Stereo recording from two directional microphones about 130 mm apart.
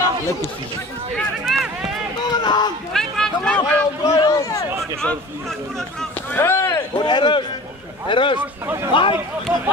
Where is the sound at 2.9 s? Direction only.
5° left (ahead or behind).